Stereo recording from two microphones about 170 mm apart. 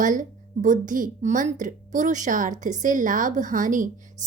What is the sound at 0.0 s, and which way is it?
A woman's voice, 50° right (ahead or behind).